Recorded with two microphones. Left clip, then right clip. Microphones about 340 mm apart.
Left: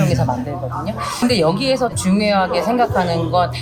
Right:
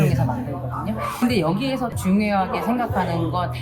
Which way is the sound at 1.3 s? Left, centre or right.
Left.